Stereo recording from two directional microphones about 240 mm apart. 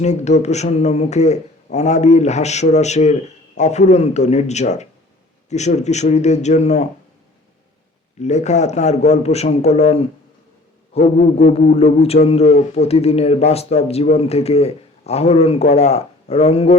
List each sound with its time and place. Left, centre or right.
0.0 s speech: left
8.2 s speech: left